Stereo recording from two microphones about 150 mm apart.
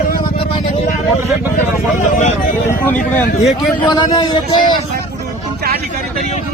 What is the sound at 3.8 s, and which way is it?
Speech, 30° left (ahead or behind).